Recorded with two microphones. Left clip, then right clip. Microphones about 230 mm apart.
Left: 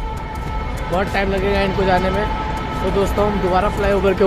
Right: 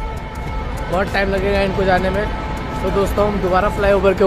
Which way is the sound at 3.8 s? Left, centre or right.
Right.